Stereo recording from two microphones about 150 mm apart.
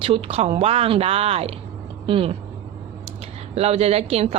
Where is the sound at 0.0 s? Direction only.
40° right (ahead or behind).